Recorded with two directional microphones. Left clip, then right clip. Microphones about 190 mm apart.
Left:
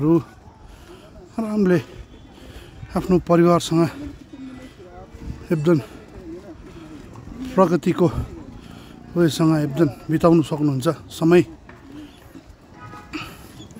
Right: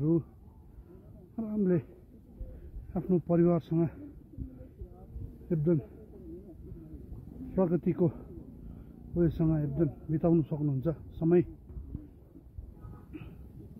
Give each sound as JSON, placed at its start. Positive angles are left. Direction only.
{"t": 1.3, "sound": "speech", "side_deg": 35}
{"t": 2.9, "sound": "a man's voice", "side_deg": 40}
{"t": 5.5, "sound": "a man's voice", "side_deg": 35}
{"t": 7.5, "sound": "a man's voice", "side_deg": 30}